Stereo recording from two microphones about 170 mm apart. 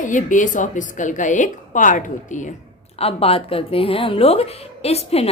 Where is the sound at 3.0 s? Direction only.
35° left (ahead or behind).